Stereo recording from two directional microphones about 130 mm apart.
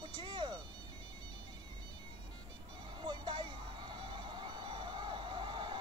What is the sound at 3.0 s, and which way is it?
Music, 35° right (ahead or behind).